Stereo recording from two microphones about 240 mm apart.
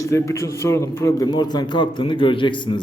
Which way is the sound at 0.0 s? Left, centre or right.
Centre.